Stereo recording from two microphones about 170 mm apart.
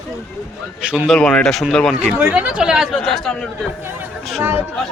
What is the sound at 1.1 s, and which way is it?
A man's voice, 5° left (ahead or behind).